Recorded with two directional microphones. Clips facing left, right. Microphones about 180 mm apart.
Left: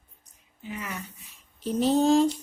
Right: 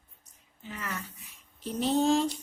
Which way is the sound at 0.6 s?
15° left (ahead or behind).